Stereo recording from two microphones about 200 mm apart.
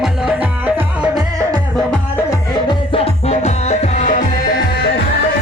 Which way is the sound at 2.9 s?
35° left (ahead or behind).